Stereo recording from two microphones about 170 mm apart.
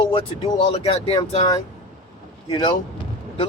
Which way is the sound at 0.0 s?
30° left (ahead or behind).